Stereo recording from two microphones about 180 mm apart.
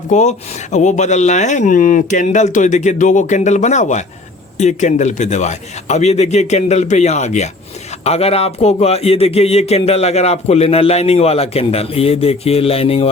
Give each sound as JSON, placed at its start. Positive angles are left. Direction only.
{"t": 0.1, "sound": "speech", "side_deg": 40}